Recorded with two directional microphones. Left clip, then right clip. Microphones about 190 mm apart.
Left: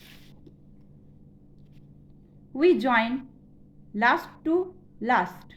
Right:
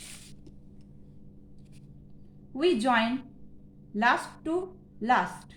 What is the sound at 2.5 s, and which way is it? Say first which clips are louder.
A woman's voice: left 4 dB; 25° left (ahead or behind).